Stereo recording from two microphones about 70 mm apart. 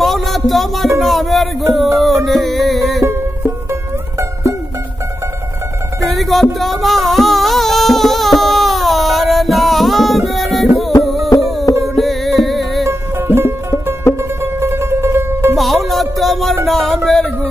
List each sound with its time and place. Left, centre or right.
0.0 s a sound: centre
2.0 s music: centre
6.0 s music: centre
13.3 s music: right
15.5 s music: centre
16.6 s a sound: centre